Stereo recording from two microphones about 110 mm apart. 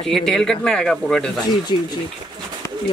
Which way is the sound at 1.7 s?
45° left (ahead or behind).